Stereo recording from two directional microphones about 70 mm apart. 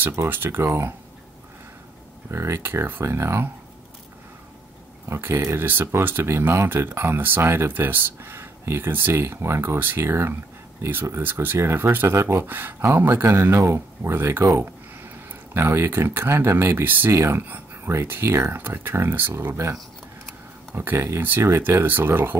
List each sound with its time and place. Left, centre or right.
0.0 s speech: right
2.3 s speech: right
5.0 s speech: right
5.7 s speech: right
15.5 s speech: right
17.1 s speech: right
21.2 s speech: right